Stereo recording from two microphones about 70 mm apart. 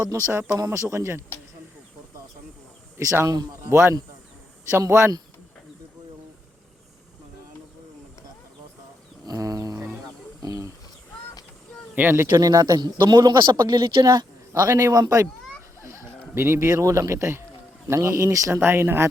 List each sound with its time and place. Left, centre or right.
0.0 s speech: right
3.0 s speech: right
3.2 s speech: right
3.7 s speech: right
9.2 s a sound: right
12.0 s speech: right
12.3 s speech: right
14.7 s speech: right
18.6 s speech: right